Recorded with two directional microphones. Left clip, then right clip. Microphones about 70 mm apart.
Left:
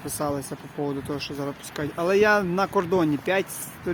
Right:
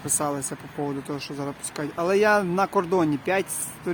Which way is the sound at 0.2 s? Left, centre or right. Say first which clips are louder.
Left 3 dB; right.